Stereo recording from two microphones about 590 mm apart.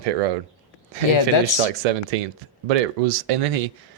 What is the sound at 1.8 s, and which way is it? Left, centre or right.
Speech, right.